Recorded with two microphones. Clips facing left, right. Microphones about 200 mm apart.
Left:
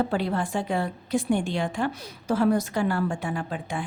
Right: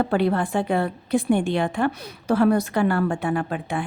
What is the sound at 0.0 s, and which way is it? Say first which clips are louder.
A woman's voice: right 5 dB; 60° right (ahead or behind).